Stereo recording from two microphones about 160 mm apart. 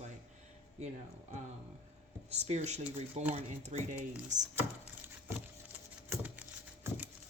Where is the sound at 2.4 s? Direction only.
45° right (ahead or behind).